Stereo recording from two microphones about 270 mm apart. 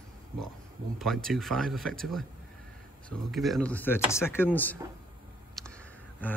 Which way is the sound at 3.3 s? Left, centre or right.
Centre.